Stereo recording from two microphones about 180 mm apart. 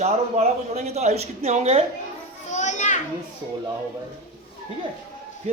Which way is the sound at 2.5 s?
40° left (ahead or behind).